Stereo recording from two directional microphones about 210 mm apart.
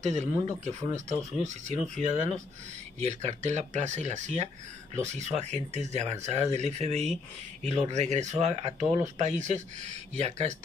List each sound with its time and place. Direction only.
0.0 s speech: 35° right (ahead or behind)